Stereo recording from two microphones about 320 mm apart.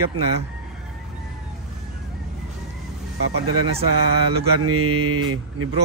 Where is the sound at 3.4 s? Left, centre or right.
Right.